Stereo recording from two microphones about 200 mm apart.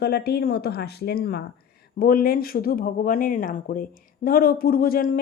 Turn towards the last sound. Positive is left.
turn(degrees=45)  # may be behind; listen again after turning